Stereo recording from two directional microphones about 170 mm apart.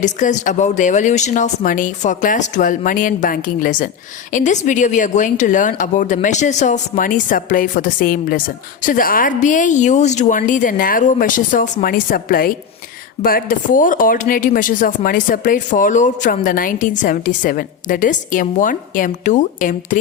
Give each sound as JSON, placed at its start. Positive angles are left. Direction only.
{"t": 0.0, "sound": "speech", "side_deg": 45}